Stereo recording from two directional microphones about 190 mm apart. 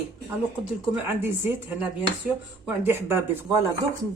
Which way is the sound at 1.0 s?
10° right (ahead or behind).